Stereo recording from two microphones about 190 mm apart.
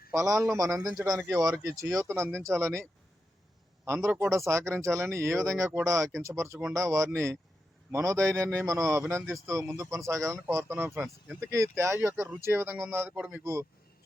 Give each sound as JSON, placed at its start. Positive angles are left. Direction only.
{"t": 0.1, "sound": "speech", "side_deg": -15}
{"t": 3.8, "sound": "speech", "side_deg": -10}